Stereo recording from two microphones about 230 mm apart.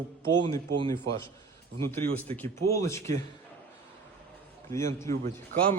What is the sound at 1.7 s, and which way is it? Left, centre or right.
A man's voice, centre.